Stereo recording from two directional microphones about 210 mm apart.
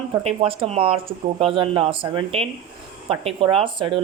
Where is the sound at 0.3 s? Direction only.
25° right (ahead or behind).